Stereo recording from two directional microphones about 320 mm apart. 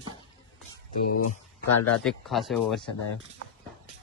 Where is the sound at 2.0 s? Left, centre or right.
Centre.